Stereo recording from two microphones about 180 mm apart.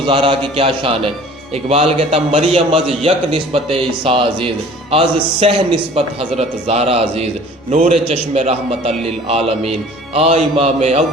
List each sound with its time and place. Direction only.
0.1 s a man's voice: 30° right (ahead or behind)